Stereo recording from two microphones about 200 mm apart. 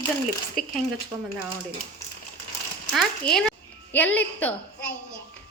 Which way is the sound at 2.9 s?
Centre (ahead or behind).